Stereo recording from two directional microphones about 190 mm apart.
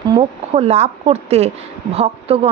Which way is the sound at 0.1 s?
30° right (ahead or behind).